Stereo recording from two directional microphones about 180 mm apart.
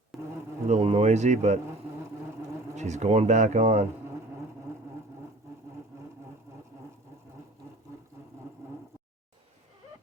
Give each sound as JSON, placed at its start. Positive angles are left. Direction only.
{"t": 0.1, "sound": "insect", "side_deg": 0}
{"t": 0.7, "sound": "speech", "side_deg": -35}
{"t": 2.7, "sound": "speech", "side_deg": -40}